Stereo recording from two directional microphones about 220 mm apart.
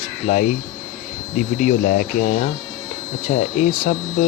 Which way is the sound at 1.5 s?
40° left (ahead or behind).